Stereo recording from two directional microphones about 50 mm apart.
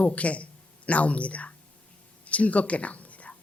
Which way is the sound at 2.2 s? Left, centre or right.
Left.